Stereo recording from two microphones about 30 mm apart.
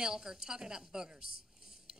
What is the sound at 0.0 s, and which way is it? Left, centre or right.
Speech, right.